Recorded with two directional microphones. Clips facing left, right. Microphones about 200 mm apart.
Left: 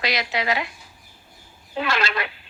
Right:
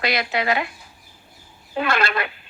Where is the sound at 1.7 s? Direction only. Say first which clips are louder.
Right 3 dB; 55° right (ahead or behind).